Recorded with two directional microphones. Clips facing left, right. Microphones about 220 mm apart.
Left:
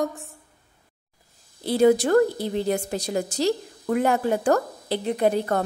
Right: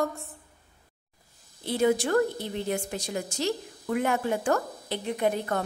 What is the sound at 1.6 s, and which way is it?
A woman's voice, 35° left (ahead or behind).